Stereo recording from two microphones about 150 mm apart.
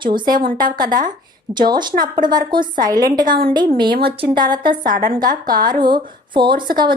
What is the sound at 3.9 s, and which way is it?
Speech, 90° right.